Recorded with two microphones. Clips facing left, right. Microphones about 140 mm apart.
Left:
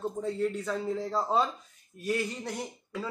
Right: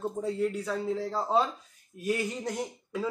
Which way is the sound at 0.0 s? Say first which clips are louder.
Right 1 dB; 10° right (ahead or behind).